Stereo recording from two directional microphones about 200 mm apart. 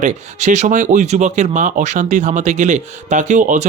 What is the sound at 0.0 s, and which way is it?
Speech, 35° right (ahead or behind).